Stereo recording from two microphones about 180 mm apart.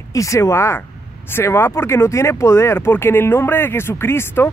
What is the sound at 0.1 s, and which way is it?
Speech, 15° left (ahead or behind).